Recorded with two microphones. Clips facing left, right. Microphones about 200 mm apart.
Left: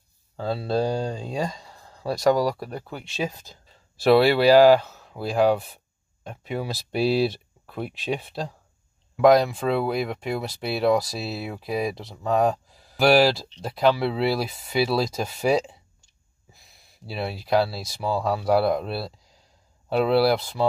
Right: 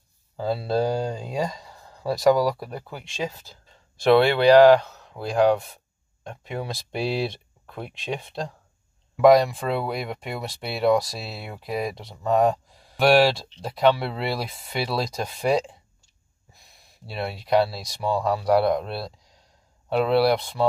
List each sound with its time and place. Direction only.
0.4 s speech: centre (ahead or behind)
3.3 s speech: 15° left (ahead or behind)
3.9 s speech: 5° left (ahead or behind)